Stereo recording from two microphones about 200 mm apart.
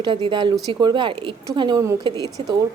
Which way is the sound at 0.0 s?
25° right (ahead or behind).